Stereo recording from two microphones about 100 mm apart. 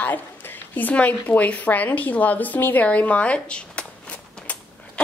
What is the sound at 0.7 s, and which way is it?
A woman's voice, 15° left (ahead or behind).